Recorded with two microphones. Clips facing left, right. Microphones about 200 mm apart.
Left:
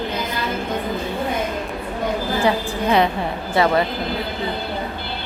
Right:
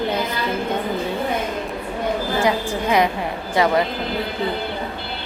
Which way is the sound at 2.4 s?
15° right (ahead or behind).